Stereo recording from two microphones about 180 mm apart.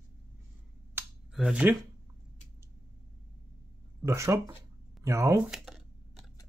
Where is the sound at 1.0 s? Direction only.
10° right (ahead or behind).